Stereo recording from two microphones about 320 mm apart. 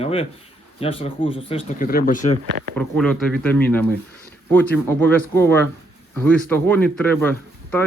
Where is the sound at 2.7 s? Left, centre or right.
Centre.